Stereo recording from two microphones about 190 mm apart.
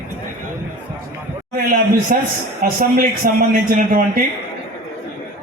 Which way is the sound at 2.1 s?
45° right (ahead or behind).